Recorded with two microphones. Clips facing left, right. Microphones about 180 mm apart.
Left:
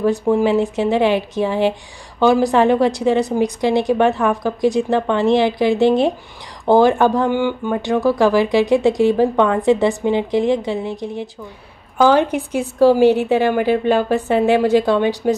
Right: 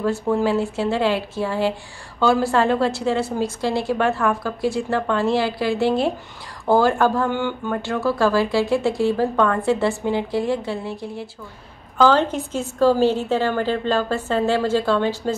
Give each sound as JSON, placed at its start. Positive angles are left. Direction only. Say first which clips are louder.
{"t": 0.0, "sound": "speech", "louder": "left 4 dB", "side_deg": 15}